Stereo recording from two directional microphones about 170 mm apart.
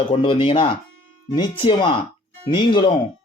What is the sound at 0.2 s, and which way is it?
A man's voice, 30° left (ahead or behind).